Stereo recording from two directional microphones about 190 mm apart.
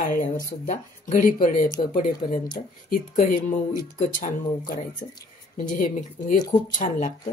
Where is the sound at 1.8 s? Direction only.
30° left (ahead or behind).